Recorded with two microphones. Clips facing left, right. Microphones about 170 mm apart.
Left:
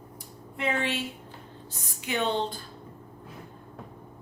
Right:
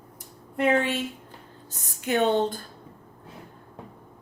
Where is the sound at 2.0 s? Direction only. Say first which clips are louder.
Right 6 dB; 45° right (ahead or behind).